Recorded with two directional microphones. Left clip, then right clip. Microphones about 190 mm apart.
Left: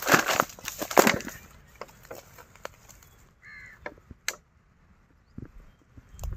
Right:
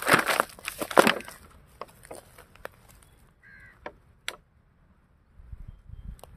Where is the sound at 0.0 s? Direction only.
10° right (ahead or behind).